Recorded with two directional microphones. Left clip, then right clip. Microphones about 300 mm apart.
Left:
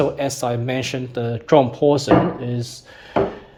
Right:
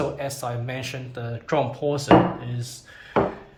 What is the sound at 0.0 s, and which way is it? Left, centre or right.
Speech, left.